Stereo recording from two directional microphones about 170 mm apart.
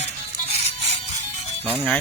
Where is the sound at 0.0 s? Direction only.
40° left (ahead or behind).